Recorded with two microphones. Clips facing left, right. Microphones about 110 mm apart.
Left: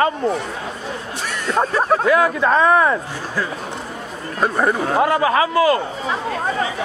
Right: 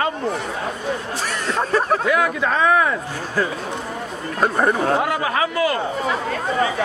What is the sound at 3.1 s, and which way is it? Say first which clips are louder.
Speech: right 2 dB; 50° right (ahead or behind).